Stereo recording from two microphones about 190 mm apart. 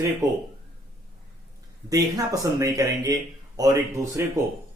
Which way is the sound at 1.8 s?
20° right (ahead or behind).